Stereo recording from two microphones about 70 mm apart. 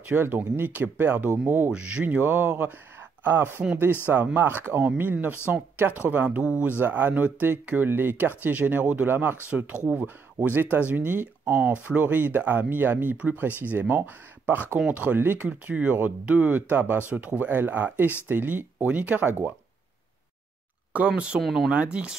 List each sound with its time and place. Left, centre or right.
0.0 s speech: right
21.1 s speech: centre
21.4 s speech: centre
21.6 s speech: centre